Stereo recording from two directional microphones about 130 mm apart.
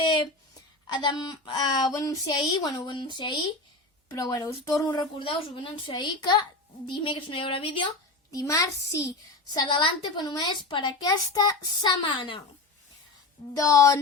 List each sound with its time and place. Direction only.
0.0 s a sound: 35° left (ahead or behind)
0.9 s a woman's voice: 35° left (ahead or behind)
4.1 s speech: 25° left (ahead or behind)
5.2 s a woman's voice: 40° left (ahead or behind)
8.3 s a woman's voice: 25° left (ahead or behind)
13.6 s speech: 25° left (ahead or behind)